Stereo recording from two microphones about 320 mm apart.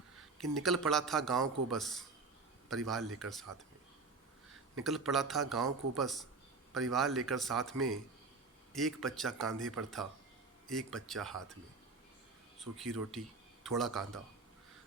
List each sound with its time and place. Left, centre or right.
0.2 s a man's voice: centre
4.8 s a man's voice: centre
9.6 s speech: right
10.7 s a man's voice: centre
12.5 s a man's voice: centre